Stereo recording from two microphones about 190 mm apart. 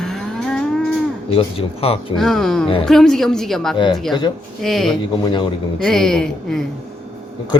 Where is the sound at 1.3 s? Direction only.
30° left (ahead or behind).